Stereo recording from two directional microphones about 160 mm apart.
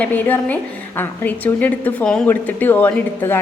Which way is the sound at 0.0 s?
10° left (ahead or behind).